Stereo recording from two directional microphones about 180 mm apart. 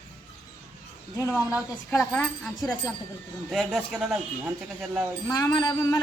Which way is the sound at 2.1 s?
Centre (ahead or behind).